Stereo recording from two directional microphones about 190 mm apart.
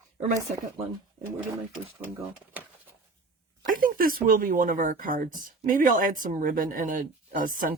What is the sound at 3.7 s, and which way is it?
Speech, 45° right (ahead or behind).